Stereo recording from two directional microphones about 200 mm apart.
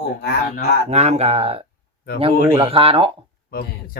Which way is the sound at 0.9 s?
35° right (ahead or behind).